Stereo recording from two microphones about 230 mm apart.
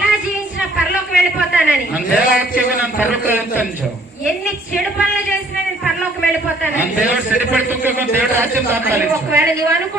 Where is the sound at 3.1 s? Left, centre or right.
Centre.